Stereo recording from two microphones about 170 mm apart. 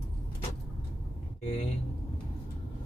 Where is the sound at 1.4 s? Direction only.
35° left (ahead or behind).